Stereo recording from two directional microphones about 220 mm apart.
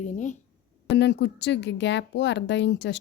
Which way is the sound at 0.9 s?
50° left (ahead or behind).